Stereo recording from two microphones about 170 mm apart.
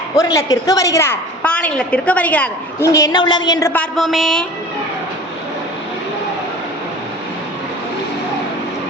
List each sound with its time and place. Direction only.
0.3 s a woman's voice: 20° left (ahead or behind)
2.8 s a woman's voice: 20° left (ahead or behind)
3.7 s a woman's voice: 5° left (ahead or behind)